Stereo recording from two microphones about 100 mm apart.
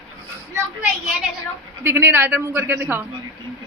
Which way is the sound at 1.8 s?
25° right (ahead or behind).